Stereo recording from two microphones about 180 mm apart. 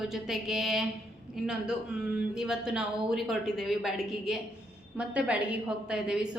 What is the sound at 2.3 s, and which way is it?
A woman's voice, 5° right (ahead or behind).